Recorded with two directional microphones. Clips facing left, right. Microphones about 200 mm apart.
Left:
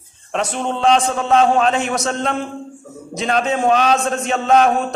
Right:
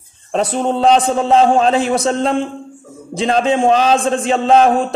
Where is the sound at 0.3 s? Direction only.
35° right (ahead or behind).